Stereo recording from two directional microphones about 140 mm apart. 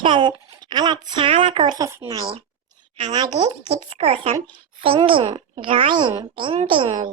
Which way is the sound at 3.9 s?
45° right (ahead or behind).